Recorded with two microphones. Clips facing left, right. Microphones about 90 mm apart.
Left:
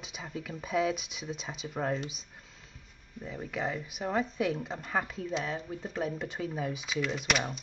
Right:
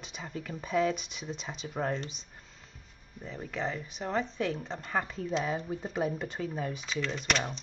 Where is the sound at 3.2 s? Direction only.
5° left (ahead or behind).